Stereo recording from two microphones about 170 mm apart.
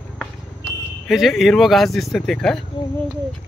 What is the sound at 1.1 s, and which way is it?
Speech, centre (ahead or behind).